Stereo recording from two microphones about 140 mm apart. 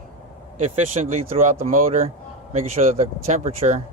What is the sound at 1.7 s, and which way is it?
Speech, 70° right (ahead or behind).